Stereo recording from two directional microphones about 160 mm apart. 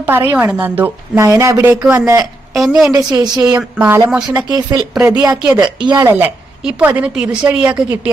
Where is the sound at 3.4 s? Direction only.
10° right (ahead or behind).